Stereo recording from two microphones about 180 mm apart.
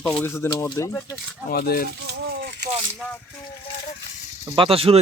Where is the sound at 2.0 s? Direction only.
65° right (ahead or behind).